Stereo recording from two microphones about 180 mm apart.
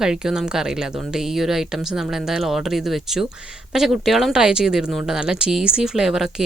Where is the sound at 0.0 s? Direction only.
5° right (ahead or behind).